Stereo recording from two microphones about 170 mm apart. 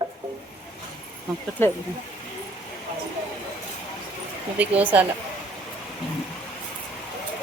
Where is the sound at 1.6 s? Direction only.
15° left (ahead or behind).